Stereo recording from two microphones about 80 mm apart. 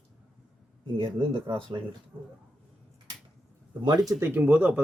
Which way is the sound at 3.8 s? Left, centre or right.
Right.